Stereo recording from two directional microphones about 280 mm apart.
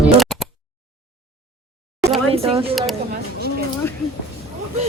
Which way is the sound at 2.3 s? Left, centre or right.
Right.